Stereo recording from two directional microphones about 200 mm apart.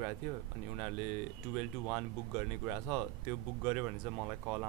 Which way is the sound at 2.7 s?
5° right (ahead or behind).